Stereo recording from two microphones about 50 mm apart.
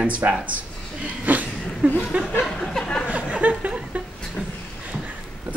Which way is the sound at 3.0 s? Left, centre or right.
Right.